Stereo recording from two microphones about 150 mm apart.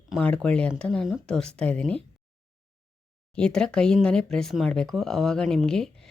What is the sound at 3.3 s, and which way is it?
Speech, 5° left (ahead or behind).